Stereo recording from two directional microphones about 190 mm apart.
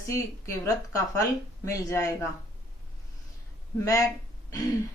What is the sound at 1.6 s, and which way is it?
Speech, 15° left (ahead or behind).